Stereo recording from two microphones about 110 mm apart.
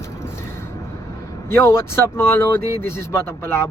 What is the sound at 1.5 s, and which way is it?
Speech, 25° left (ahead or behind).